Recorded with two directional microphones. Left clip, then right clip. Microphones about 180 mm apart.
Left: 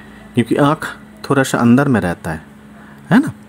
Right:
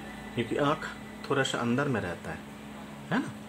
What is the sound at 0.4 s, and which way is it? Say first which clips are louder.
Speech: left 14 dB; 45° left (ahead or behind).